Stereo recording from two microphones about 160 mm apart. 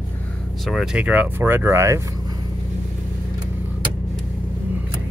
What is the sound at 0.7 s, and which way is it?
Speech, 5° right (ahead or behind).